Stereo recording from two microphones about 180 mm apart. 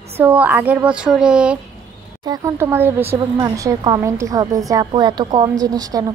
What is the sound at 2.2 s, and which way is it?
A woman's voice, 20° right (ahead or behind).